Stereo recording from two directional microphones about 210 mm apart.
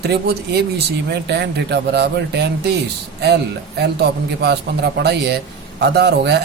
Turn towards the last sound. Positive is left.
turn(degrees=-50)  # may be behind; listen again after turning